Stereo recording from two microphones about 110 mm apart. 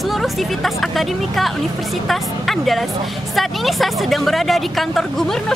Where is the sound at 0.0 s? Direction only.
Centre (ahead or behind).